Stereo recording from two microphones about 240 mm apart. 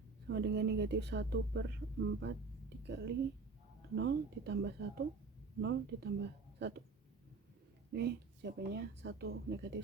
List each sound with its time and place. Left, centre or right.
0.3 s speech: right
2.2 s a sound: right
3.9 s speech: right
7.9 s speech: right